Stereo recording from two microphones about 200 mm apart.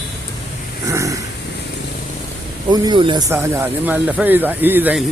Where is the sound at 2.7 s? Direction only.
25° right (ahead or behind).